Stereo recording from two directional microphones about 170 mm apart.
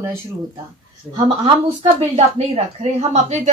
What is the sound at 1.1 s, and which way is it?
A woman's voice, 30° right (ahead or behind).